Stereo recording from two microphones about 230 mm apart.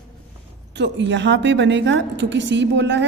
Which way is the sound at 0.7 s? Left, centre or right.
Right.